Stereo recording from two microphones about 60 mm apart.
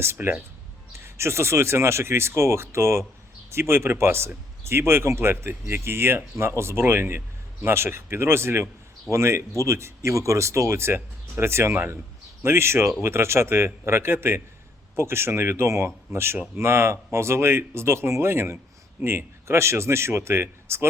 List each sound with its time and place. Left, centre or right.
0.0 s speech: right